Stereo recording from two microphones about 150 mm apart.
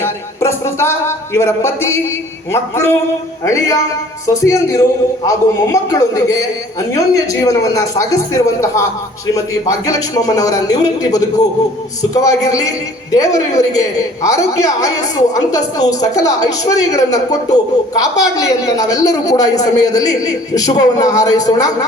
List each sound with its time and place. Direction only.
0.0 s a man's voice: 20° left (ahead or behind)